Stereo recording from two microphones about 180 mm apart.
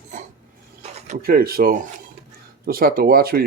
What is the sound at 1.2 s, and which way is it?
Speech, 55° right (ahead or behind).